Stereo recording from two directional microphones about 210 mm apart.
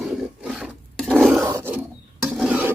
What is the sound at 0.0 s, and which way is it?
Roaring cats, centre (ahead or behind).